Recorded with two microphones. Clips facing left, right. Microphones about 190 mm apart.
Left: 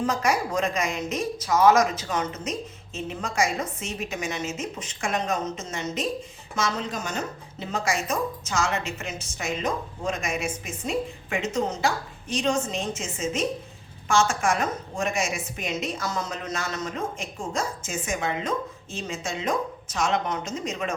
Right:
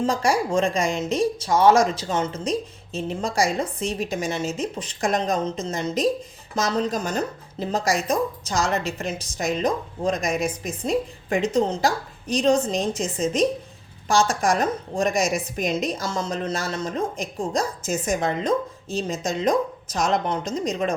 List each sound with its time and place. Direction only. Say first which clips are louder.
0.0 s speech: right 3 dB; 30° right (ahead or behind)